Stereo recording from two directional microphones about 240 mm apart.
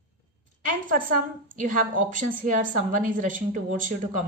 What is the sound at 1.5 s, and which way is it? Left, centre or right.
A woman's voice, right.